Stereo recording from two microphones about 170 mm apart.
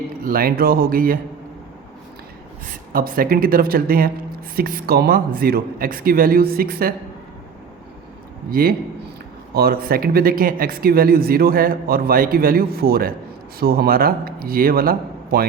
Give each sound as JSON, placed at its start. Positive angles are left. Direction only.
{"t": 0.3, "sound": "speech", "side_deg": -60}
{"t": 2.9, "sound": "speech", "side_deg": -55}
{"t": 8.4, "sound": "speech", "side_deg": -60}